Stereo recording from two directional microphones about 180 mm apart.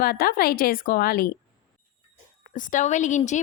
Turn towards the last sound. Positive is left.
turn(degrees=40)  # may be behind; listen again after turning